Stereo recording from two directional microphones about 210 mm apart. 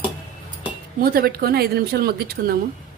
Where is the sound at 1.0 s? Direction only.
45° right (ahead or behind).